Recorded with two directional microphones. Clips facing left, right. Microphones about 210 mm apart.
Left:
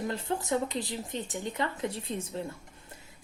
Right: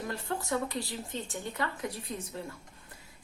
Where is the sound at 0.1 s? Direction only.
20° left (ahead or behind).